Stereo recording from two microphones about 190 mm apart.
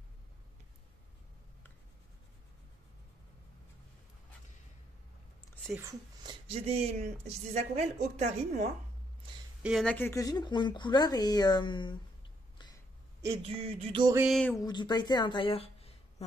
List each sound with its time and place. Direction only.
5.8 s speech: 15° right (ahead or behind)
6.4 s speech: 30° right (ahead or behind)
9.6 s speech: centre (ahead or behind)
9.9 s speech: 15° left (ahead or behind)
13.4 s speech: 35° right (ahead or behind)
14.2 s a sound: centre (ahead or behind)
14.5 s a woman's voice: 20° left (ahead or behind)